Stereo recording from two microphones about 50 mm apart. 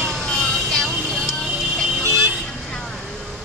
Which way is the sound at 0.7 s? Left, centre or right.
Centre.